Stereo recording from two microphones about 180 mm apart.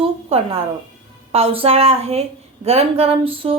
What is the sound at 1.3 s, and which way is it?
Speech, 35° right (ahead or behind).